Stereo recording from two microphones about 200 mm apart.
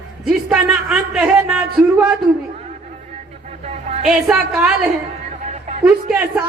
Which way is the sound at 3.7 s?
35° right (ahead or behind).